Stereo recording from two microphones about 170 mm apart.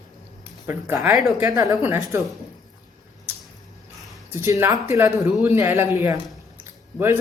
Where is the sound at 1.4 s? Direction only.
20° right (ahead or behind).